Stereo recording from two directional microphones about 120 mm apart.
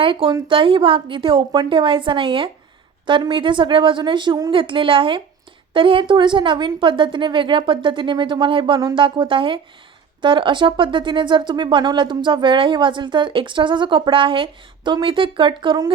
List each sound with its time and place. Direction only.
0.0 s a woman's voice: 45° right (ahead or behind)
4.5 s a woman's voice: 45° right (ahead or behind)